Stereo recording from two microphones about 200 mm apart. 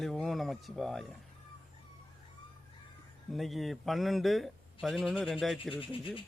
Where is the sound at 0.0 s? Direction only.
Centre (ahead or behind).